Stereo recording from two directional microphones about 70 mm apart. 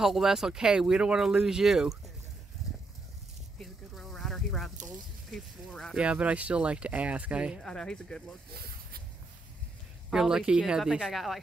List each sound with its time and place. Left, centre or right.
0.0 s speech: centre
3.5 s a sound: centre
5.7 s speech: centre
5.9 s speech: centre
7.6 s speech: centre
10.1 s speech: centre